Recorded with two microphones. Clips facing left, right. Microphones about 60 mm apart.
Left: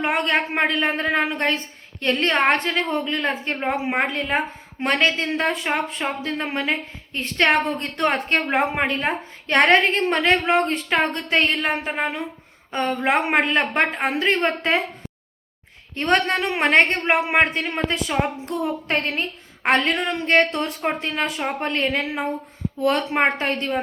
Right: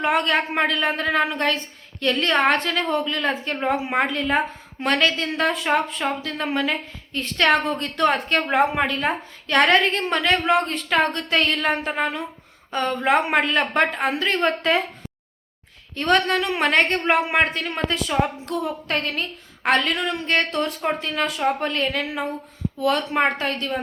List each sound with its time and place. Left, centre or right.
0.0 s a woman's voice: left
16.0 s a woman's voice: left